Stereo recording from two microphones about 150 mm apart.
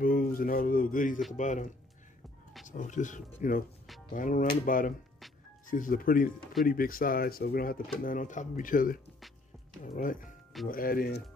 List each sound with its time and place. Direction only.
0.0 s speech: 70° left (ahead or behind)
10.7 s speech: 75° left (ahead or behind)